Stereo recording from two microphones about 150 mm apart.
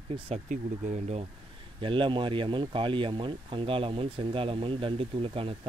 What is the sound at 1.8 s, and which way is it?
Speech, 35° right (ahead or behind).